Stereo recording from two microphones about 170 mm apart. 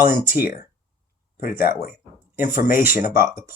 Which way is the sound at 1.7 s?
60° left (ahead or behind).